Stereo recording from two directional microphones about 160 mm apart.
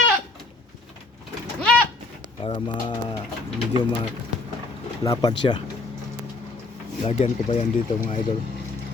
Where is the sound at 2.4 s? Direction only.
30° left (ahead or behind).